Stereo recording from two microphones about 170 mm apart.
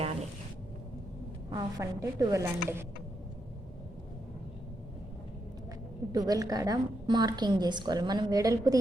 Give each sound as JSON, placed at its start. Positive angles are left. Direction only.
{"t": 1.5, "sound": "a woman's voice", "side_deg": -20}
{"t": 6.1, "sound": "a woman's voice", "side_deg": -20}